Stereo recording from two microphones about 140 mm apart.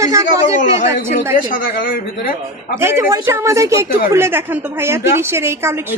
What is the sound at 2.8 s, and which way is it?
Speech, 20° right (ahead or behind).